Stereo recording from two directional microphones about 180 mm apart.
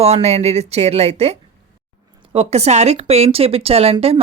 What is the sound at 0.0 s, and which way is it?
Speech, 35° right (ahead or behind).